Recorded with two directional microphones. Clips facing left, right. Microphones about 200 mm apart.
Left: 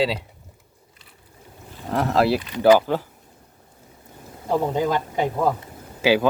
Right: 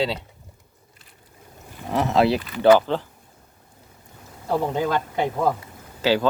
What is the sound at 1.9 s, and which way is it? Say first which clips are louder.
Speech: even; centre (ahead or behind).